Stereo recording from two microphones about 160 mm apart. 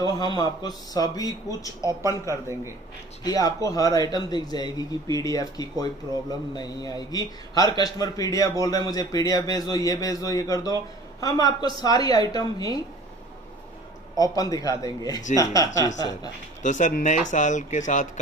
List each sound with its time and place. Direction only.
0.0 s a man's voice: 25° left (ahead or behind)
1.8 s speech: 25° right (ahead or behind)
3.3 s a man's voice: 20° left (ahead or behind)
14.1 s a man's voice: 20° left (ahead or behind)
16.6 s speech: 50° left (ahead or behind)